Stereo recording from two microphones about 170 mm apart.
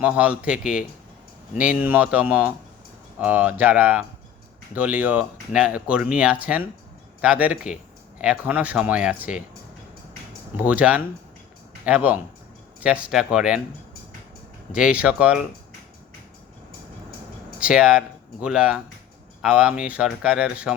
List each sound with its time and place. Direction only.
0.0 s speech: 10° right (ahead or behind)
10.6 s speech: 10° right (ahead or behind)
14.7 s speech: 5° right (ahead or behind)
17.6 s speech: 5° right (ahead or behind)